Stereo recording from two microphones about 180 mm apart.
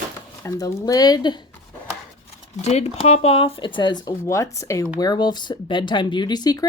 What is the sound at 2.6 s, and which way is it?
Speech, 35° left (ahead or behind).